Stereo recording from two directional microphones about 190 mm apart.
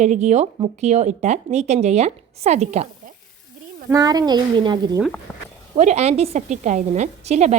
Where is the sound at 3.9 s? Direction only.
20° right (ahead or behind).